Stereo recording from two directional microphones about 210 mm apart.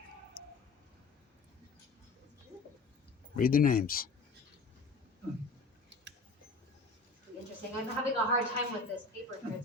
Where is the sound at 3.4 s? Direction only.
45° left (ahead or behind).